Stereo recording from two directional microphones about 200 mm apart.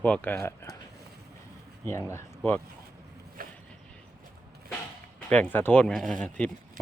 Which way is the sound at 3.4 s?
45° right (ahead or behind).